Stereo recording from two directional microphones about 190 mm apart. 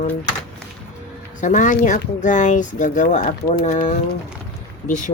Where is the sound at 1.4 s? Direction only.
40° left (ahead or behind).